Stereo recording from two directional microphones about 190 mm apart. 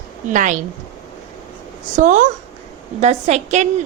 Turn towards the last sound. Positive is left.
turn(degrees=-35)  # may be behind; listen again after turning